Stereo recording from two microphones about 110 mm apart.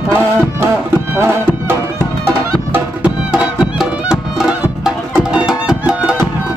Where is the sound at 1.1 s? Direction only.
20° right (ahead or behind).